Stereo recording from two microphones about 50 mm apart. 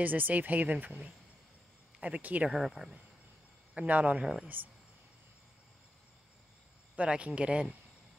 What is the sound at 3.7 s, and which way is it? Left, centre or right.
Speech, right.